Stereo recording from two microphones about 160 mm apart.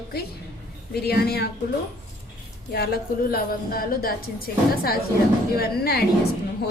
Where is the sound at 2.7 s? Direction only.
75° left (ahead or behind).